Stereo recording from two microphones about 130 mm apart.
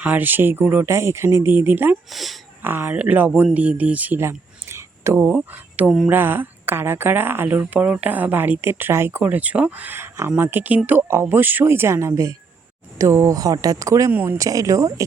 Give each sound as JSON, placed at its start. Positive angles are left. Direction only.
{"t": 0.0, "sound": "speech", "side_deg": -10}
{"t": 2.0, "sound": "speech", "side_deg": 0}
{"t": 2.6, "sound": "speech", "side_deg": -15}
{"t": 14.1, "sound": "speech", "side_deg": -15}
{"t": 14.3, "sound": "speech", "side_deg": -25}